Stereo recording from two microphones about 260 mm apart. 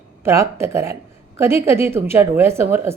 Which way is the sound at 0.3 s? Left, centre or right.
Centre.